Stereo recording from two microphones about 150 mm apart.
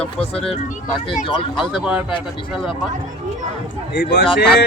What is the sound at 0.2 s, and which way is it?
Speech, 5° left (ahead or behind).